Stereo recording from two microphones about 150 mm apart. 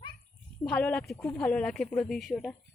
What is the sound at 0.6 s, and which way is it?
Speech, 10° left (ahead or behind).